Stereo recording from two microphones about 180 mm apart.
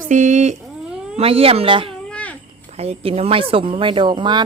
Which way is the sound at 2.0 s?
5° left (ahead or behind).